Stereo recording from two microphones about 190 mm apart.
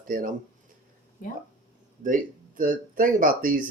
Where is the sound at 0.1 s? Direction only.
45° right (ahead or behind).